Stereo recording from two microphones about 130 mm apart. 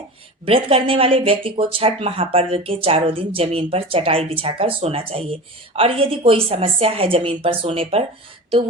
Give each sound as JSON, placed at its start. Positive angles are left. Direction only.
{"t": 0.4, "sound": "speech", "side_deg": -45}